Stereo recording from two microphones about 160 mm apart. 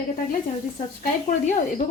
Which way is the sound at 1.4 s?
50° left (ahead or behind).